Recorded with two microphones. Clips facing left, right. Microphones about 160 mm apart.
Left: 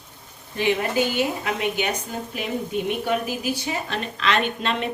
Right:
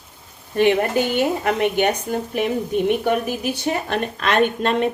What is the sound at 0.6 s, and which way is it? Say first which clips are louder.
A woman's voice: right 5 dB; 55° right (ahead or behind).